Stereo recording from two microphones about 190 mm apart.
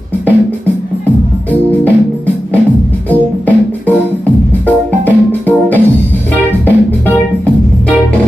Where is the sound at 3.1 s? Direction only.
10° left (ahead or behind).